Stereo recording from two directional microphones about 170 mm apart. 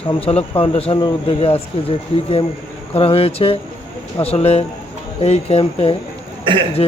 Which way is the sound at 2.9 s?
35° left (ahead or behind).